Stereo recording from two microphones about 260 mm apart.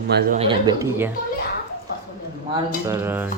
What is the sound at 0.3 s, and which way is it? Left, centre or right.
Speech, centre.